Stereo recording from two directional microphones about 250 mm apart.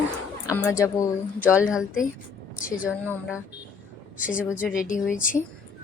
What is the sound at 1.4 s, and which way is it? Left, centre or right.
A woman's voice, centre.